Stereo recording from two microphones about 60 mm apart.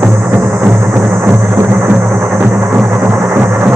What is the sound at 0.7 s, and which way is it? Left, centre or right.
Music, right.